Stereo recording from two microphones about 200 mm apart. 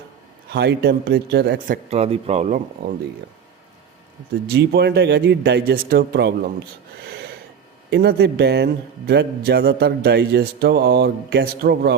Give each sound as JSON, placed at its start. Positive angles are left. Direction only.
{"t": 0.5, "sound": "a man's voice", "side_deg": -55}
{"t": 2.8, "sound": "a man's voice", "side_deg": -50}
{"t": 4.4, "sound": "speech", "side_deg": -55}
{"t": 7.0, "sound": "snort", "side_deg": -55}
{"t": 7.9, "sound": "a man's voice", "side_deg": -55}